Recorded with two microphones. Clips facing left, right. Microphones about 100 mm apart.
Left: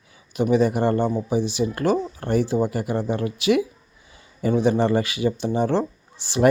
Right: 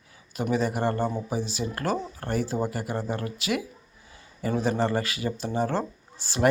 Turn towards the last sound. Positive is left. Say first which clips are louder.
# left 5 dB
turn(degrees=20)  # may be behind; listen again after turning